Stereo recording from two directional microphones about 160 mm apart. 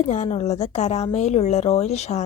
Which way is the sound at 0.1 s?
45° left (ahead or behind).